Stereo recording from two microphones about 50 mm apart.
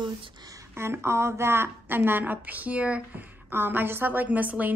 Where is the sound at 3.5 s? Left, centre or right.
Right.